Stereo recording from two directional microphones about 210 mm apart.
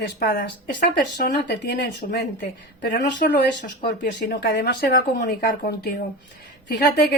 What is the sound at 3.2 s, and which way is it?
A woman's voice, 45° left (ahead or behind).